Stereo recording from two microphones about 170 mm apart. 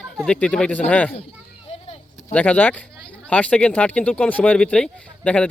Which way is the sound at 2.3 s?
10° left (ahead or behind).